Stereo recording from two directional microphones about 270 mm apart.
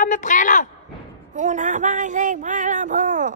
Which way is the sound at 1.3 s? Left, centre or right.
Right.